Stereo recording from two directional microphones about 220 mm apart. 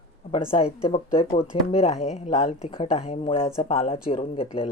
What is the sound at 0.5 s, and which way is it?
Speech, 25° left (ahead or behind).